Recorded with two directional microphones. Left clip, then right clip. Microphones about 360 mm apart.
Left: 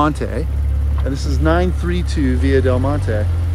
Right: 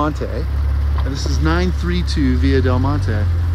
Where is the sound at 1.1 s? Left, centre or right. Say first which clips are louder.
Left 3 dB; centre.